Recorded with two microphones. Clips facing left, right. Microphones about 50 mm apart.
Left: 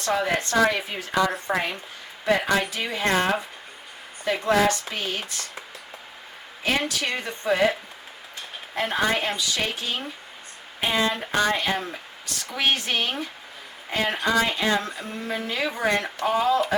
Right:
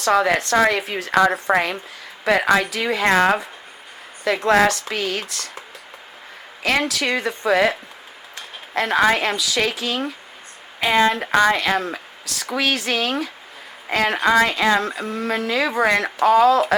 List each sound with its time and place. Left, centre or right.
0.0 s speech: right
6.6 s speech: right